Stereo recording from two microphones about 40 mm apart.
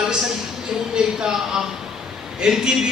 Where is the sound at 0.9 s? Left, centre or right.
Centre.